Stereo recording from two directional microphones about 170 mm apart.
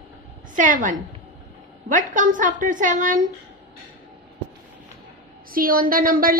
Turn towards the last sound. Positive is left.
turn(degrees=-55)  # may be behind; listen again after turning